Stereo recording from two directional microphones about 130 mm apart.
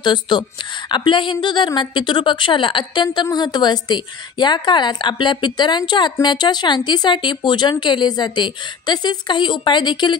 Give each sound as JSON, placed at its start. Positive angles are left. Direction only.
{"t": 0.0, "sound": "a woman's voice", "side_deg": 35}